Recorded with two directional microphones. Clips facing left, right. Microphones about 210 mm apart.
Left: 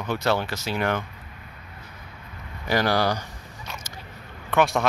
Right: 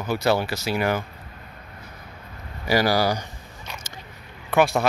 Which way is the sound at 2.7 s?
5° right (ahead or behind).